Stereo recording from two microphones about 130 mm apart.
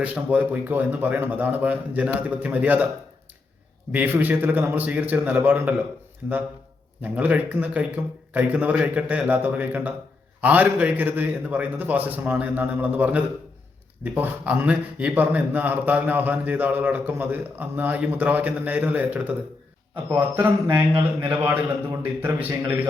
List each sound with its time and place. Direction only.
0.0 s a man's voice: 10° right (ahead or behind)
3.9 s a man's voice: 15° right (ahead or behind)